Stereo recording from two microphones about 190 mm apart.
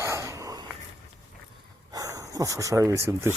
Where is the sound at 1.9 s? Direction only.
15° right (ahead or behind).